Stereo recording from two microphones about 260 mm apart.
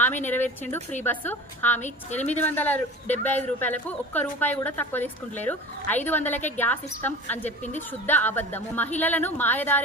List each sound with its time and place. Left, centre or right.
0.0 s a woman's voice: centre
1.8 s a woman's voice: left
2.4 s speech: centre